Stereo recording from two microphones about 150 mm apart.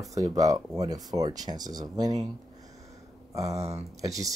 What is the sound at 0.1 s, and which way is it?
Speech, 25° right (ahead or behind).